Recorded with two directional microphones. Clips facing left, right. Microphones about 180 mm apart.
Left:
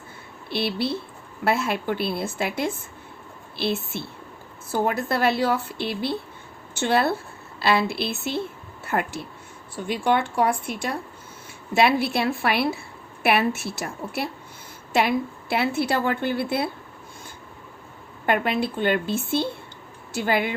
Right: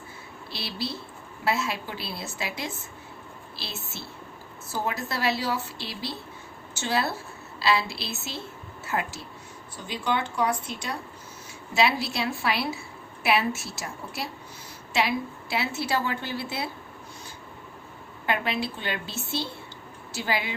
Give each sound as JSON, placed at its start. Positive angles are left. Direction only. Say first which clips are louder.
{"t": 0.5, "sound": "a woman's voice", "louder": "left 9 dB", "side_deg": 60}
{"t": 18.3, "sound": "a woman's voice", "louder": "left 5 dB", "side_deg": 50}